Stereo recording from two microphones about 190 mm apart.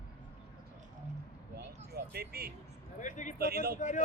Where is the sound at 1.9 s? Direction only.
55° right (ahead or behind).